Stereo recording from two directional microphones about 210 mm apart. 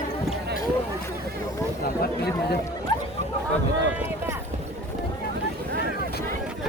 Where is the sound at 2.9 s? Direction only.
20° left (ahead or behind).